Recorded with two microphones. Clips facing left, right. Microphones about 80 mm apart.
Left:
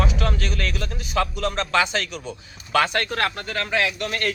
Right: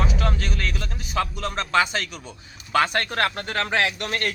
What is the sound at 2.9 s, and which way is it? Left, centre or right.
A man's voice, right.